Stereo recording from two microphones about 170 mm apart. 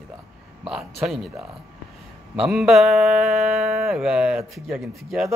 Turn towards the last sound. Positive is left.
turn(degrees=0)  # may be behind; listen again after turning